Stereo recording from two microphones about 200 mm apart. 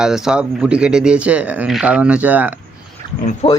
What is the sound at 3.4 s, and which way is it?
Speech, 30° left (ahead or behind).